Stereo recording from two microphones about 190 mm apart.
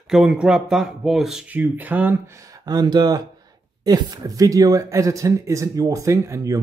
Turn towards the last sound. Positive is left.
turn(degrees=-15)  # may be behind; listen again after turning